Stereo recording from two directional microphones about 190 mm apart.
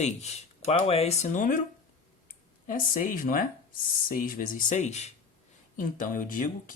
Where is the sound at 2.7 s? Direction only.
45° left (ahead or behind).